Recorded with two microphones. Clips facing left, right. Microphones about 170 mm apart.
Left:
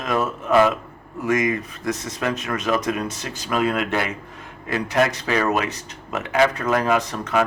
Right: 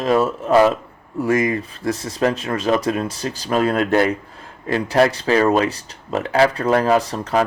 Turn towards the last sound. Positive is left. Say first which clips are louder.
# right 3 dB
turn(degrees=-30)  # may be behind; listen again after turning